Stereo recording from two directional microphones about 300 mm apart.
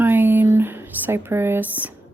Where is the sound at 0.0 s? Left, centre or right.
Centre.